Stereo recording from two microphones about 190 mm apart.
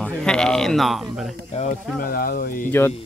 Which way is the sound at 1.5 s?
35° left (ahead or behind).